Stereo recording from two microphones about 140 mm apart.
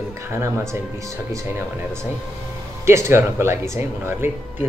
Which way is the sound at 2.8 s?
20° right (ahead or behind).